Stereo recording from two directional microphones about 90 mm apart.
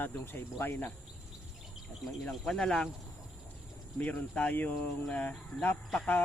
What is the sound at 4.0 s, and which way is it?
Speech, 20° left (ahead or behind).